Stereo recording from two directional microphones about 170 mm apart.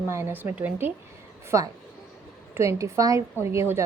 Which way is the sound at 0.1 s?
15° right (ahead or behind).